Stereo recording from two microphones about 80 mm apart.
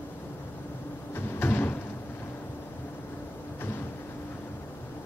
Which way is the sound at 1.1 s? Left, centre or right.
Left.